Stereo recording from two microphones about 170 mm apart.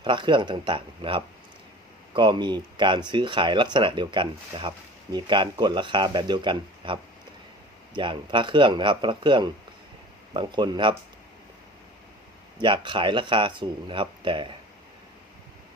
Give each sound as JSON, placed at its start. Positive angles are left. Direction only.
{"t": 0.0, "sound": "speech", "side_deg": -30}
{"t": 12.5, "sound": "speech", "side_deg": -30}